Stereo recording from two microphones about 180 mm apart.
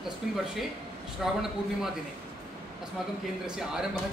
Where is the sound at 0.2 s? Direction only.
5° right (ahead or behind).